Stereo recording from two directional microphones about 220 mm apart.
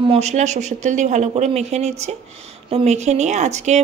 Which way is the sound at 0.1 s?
30° right (ahead or behind).